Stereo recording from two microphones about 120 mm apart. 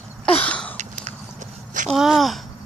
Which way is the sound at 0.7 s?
90° right.